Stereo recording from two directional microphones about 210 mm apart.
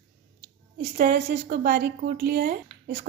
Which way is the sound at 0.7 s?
50° right (ahead or behind).